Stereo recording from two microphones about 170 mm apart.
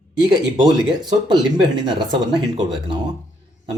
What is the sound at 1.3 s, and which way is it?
Speech, 25° right (ahead or behind).